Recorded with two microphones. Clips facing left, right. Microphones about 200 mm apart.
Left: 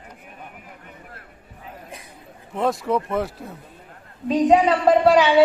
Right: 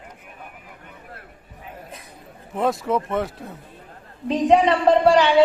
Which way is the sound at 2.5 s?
Centre (ahead or behind).